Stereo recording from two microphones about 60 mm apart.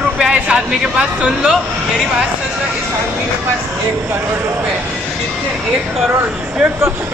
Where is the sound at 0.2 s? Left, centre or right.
Centre.